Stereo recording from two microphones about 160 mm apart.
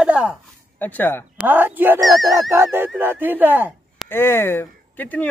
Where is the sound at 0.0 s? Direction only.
5° right (ahead or behind).